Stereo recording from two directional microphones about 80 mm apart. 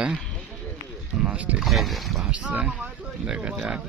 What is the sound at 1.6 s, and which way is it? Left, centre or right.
Speech, centre.